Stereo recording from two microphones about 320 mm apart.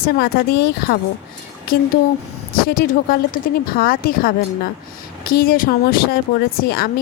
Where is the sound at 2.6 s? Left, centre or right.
Left.